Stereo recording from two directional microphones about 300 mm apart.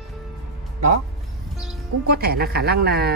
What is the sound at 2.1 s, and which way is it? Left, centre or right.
Speech, right.